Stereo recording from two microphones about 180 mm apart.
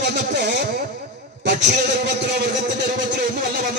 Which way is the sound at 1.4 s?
70° right (ahead or behind).